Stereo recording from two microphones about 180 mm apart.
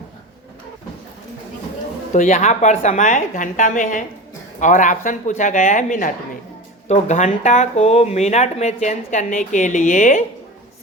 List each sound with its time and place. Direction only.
2.1 s speech: 40° left (ahead or behind)